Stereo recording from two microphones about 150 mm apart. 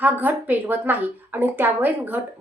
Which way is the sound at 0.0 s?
10° right (ahead or behind).